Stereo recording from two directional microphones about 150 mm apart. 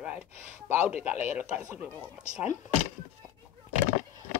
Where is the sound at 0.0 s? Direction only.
5° right (ahead or behind).